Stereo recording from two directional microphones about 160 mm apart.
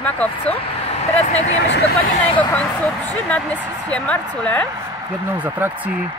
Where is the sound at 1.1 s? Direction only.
45° left (ahead or behind).